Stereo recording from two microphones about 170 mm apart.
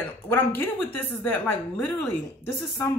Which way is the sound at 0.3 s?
10° left (ahead or behind).